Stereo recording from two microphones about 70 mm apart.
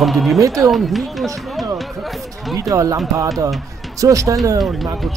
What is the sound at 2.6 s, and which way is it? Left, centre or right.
A man's voice, right.